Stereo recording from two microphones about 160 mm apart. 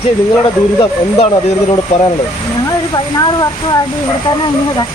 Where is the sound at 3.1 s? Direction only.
25° left (ahead or behind).